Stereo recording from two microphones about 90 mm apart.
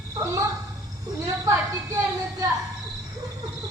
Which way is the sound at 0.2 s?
40° right (ahead or behind).